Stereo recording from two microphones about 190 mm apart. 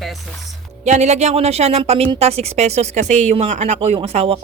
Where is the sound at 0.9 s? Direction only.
35° right (ahead or behind).